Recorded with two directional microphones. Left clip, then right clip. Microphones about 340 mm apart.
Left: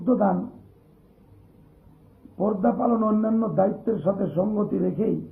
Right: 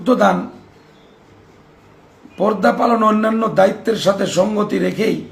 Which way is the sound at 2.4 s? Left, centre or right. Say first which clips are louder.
Right 9 dB; right.